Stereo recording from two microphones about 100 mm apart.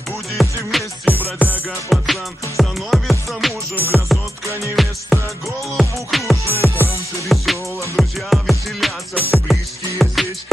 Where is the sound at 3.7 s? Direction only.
20° right (ahead or behind).